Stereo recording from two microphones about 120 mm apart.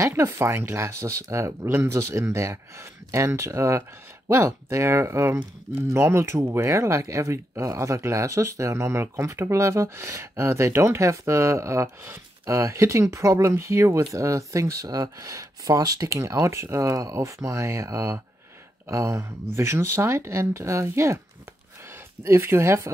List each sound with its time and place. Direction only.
0.0 s speech: 20° right (ahead or behind)
22.2 s speech: 20° right (ahead or behind)